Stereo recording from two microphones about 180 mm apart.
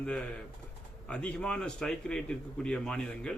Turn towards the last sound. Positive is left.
turn(degrees=5)  # may be behind; listen again after turning